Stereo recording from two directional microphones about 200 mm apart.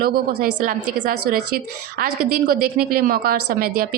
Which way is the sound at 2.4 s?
50° right (ahead or behind).